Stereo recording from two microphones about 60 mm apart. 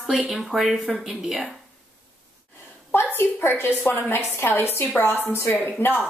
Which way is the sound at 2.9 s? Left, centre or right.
Left.